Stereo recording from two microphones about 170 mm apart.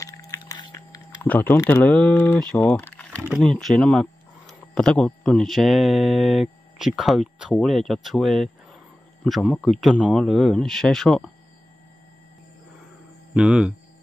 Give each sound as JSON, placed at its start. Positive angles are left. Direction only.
{"t": 0.0, "sound": "a sound", "side_deg": 20}
{"t": 1.2, "sound": "speech", "side_deg": 10}
{"t": 13.3, "sound": "hum", "side_deg": -5}